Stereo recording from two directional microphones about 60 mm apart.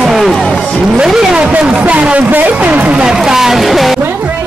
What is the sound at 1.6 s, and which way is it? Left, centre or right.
Speech, centre.